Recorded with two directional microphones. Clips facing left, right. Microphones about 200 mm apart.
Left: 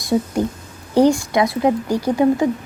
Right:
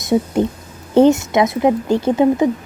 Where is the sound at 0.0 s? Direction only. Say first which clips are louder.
Right 3 dB; 20° right (ahead or behind).